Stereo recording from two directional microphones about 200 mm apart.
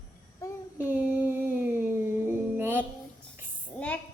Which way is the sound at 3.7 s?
10° left (ahead or behind).